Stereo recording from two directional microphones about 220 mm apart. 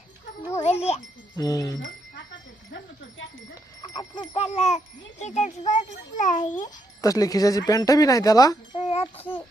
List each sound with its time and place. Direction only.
0.6 s wind chime: 30° left (ahead or behind)
1.4 s speech: 15° left (ahead or behind)
3.8 s a sound: 20° left (ahead or behind)
4.4 s a child's voice: 30° left (ahead or behind)
7.0 s speech: 15° left (ahead or behind)
8.8 s music: 25° left (ahead or behind)